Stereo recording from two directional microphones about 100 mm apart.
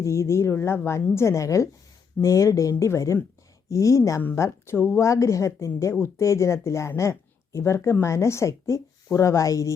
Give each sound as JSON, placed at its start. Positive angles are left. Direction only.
{"t": 0.0, "sound": "a woman's voice", "side_deg": 30}